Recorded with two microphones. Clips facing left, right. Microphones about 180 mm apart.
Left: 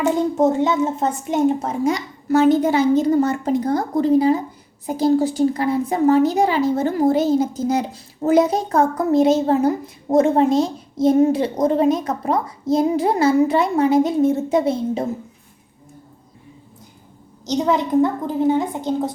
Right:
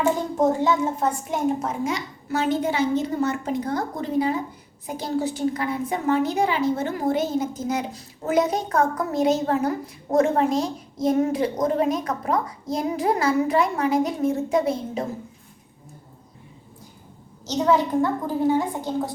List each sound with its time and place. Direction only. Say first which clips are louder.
0.3 s a child's voice: left 3 dB; 20° left (ahead or behind)
1.8 s a woman's voice: left 6 dB; 40° left (ahead or behind)
17.4 s a child's voice: left 1 dB; 15° left (ahead or behind)